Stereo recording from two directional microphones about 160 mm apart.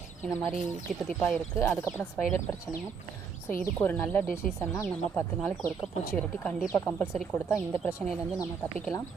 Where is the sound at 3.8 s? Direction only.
10° left (ahead or behind).